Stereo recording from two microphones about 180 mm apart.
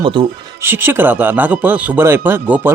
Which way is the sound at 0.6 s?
10° right (ahead or behind).